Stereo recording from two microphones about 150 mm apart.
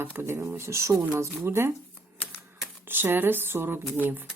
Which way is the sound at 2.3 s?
10° right (ahead or behind).